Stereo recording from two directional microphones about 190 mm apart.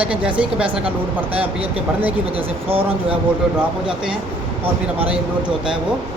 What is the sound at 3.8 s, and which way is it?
Speech, 5° right (ahead or behind).